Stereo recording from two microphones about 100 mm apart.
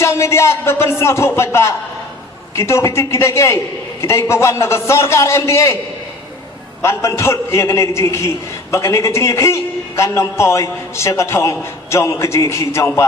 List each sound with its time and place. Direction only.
0.0 s a man's voice: 30° left (ahead or behind)
6.8 s a man's voice: 30° left (ahead or behind)